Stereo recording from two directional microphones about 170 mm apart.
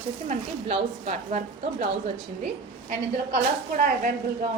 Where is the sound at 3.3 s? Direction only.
55° right (ahead or behind).